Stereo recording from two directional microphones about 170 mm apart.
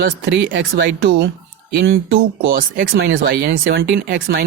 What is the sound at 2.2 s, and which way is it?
Speech, 60° right (ahead or behind).